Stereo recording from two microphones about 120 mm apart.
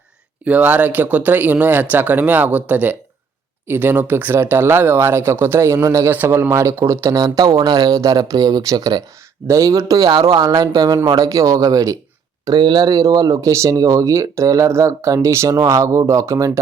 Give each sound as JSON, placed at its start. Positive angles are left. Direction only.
{"t": 0.4, "sound": "speech", "side_deg": -15}